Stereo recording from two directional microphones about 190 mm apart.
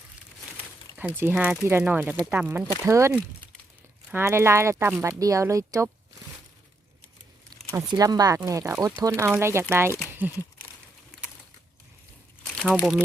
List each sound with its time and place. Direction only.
0.9 s speech: 10° right (ahead or behind)
4.1 s speech: 15° right (ahead or behind)
7.7 s speech: 20° right (ahead or behind)
12.5 s speech: centre (ahead or behind)